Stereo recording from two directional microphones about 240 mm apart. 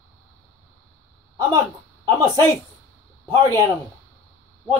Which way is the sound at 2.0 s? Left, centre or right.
Centre.